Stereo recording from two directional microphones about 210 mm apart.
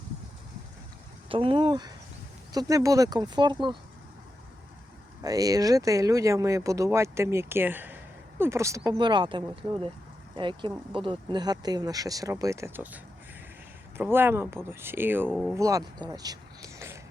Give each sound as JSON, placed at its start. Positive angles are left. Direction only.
{"t": 1.3, "sound": "speech", "side_deg": -25}
{"t": 5.2, "sound": "speech", "side_deg": -15}
{"t": 14.0, "sound": "speech", "side_deg": -10}
{"t": 15.3, "sound": "speech", "side_deg": 0}
{"t": 15.5, "sound": "speech", "side_deg": -15}